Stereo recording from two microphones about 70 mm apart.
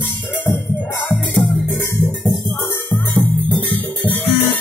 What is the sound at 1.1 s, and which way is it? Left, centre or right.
Music, centre.